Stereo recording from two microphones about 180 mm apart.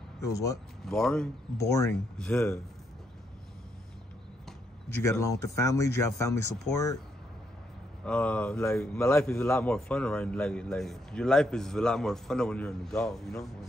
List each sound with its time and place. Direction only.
0.2 s speech: 20° left (ahead or behind)
0.8 s a man's voice: centre (ahead or behind)
1.6 s speech: 15° left (ahead or behind)
2.1 s a man's voice: 5° left (ahead or behind)
4.5 s speech: 15° left (ahead or behind)
8.0 s a man's voice: 5° left (ahead or behind)